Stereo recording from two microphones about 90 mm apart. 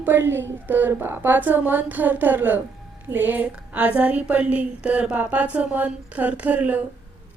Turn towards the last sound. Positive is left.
turn(degrees=-15)  # may be behind; listen again after turning